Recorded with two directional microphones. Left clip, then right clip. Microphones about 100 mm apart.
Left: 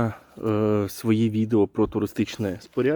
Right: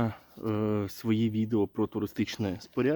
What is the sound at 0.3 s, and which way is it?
Speech, 35° left (ahead or behind).